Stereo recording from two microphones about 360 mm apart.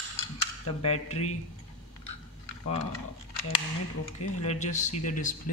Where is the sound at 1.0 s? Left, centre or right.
Centre.